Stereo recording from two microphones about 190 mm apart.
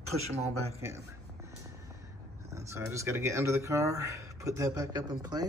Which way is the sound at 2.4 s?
15° right (ahead or behind).